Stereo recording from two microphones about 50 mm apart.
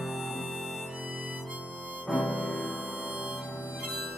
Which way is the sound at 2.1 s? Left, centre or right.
Centre.